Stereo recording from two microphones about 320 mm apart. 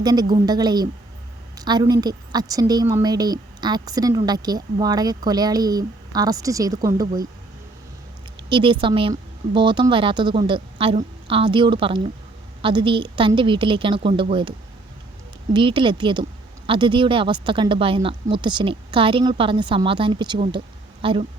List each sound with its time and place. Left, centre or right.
0.0 s a woman's voice: centre
8.4 s a woman's voice: centre
15.5 s a woman's voice: centre